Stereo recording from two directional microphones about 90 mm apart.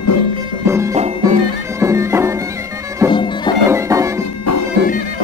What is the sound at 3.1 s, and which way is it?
Music, 60° left (ahead or behind).